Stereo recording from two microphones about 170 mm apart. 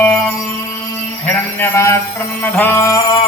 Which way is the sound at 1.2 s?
10° left (ahead or behind).